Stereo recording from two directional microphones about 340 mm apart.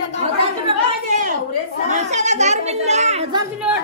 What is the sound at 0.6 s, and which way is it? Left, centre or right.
Chatter, right.